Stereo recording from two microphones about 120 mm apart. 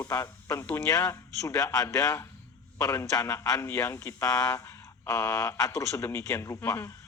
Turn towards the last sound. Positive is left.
turn(degrees=20)  # may be behind; listen again after turning